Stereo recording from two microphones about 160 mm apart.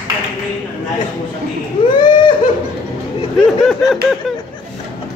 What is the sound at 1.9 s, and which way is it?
Baby cry, 30° left (ahead or behind).